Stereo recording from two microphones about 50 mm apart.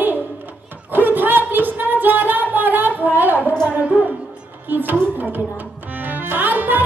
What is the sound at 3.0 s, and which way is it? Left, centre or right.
Speech, right.